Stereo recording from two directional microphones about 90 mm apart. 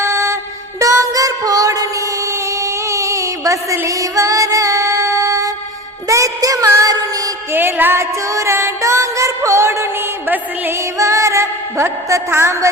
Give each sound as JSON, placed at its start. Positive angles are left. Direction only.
{"t": 0.0, "sound": "music", "side_deg": -30}
{"t": 2.6, "sound": "child singing", "side_deg": -35}
{"t": 6.1, "sound": "music", "side_deg": -35}
{"t": 7.5, "sound": "music", "side_deg": -25}
{"t": 8.3, "sound": "music", "side_deg": -35}